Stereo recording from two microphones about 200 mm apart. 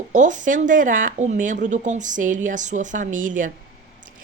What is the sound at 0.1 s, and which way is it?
Speech, 40° right (ahead or behind).